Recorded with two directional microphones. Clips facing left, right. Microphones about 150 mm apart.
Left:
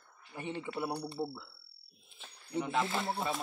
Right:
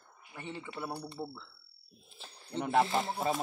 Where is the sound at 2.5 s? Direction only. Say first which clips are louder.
Right 4 dB; 60° right (ahead or behind).